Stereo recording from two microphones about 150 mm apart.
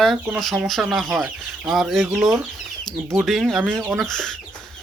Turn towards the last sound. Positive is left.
turn(degrees=5)  # may be behind; listen again after turning